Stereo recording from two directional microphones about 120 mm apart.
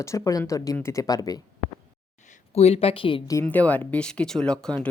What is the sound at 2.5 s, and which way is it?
Speech, 60° left (ahead or behind).